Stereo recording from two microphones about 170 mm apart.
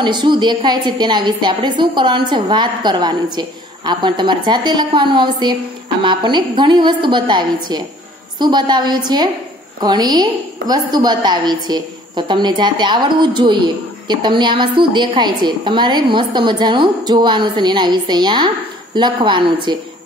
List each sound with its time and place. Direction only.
0.0 s a woman's voice: 25° right (ahead or behind)